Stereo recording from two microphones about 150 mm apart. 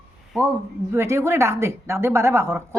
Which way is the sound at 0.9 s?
20° right (ahead or behind).